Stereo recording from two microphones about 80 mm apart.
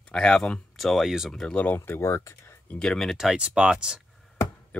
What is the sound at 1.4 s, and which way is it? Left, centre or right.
Speech, centre.